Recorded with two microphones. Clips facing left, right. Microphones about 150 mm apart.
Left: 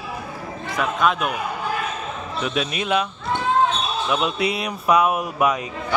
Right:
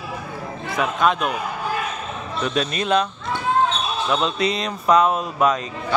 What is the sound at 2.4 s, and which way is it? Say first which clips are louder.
Speech: right 2 dB; 5° left (ahead or behind).